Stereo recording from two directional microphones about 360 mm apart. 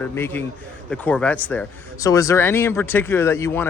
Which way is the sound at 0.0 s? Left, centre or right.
Centre.